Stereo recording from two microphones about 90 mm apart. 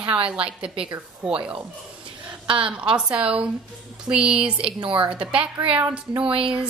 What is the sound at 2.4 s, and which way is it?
Speech, 75° right (ahead or behind).